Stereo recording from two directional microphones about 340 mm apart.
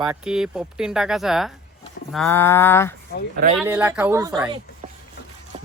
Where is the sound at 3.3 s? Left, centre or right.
Right.